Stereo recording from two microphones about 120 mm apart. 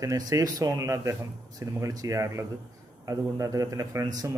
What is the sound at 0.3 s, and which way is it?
A man's voice, 30° right (ahead or behind).